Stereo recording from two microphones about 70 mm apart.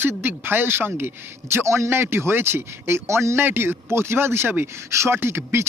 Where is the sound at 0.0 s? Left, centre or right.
Right.